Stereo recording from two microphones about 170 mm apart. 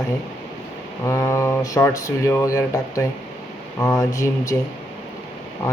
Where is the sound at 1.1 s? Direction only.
15° left (ahead or behind).